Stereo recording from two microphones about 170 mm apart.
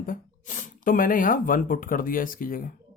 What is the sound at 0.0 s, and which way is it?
Speech, 50° left (ahead or behind).